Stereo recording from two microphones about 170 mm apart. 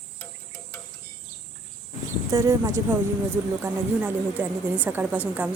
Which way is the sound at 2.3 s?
20° right (ahead or behind).